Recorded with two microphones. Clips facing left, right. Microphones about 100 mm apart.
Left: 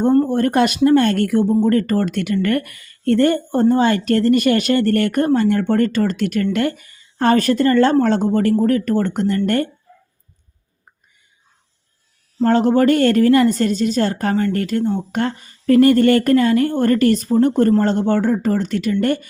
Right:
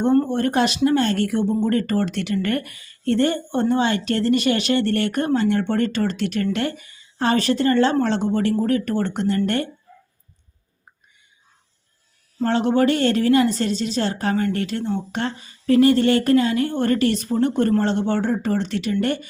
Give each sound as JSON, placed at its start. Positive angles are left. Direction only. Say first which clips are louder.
{"t": 0.3, "sound": "speech", "louder": "left 4 dB", "side_deg": 45}
{"t": 12.4, "sound": "speech", "louder": "left 4 dB", "side_deg": 40}